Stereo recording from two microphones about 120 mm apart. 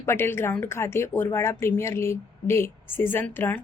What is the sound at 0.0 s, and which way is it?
A woman's voice, 20° left (ahead or behind).